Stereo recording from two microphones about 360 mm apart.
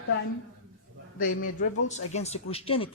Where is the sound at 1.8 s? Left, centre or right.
Centre.